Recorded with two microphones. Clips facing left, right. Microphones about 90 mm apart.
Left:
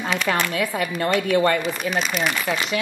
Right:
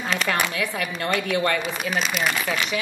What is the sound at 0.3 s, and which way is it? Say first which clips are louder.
Speech: left 2 dB; 15° left (ahead or behind).